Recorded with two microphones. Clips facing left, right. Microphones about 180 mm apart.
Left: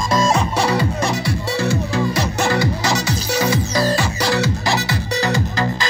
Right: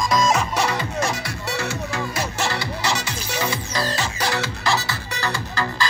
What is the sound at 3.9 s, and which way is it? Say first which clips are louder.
Music: left 5 dB; 15° left (ahead or behind).